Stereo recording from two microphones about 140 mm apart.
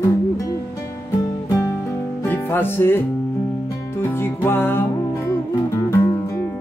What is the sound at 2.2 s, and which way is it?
Music, 15° left (ahead or behind).